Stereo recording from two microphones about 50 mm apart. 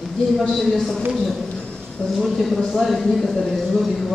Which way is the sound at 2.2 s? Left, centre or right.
Centre.